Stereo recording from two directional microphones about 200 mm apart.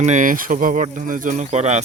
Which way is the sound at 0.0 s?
40° right (ahead or behind).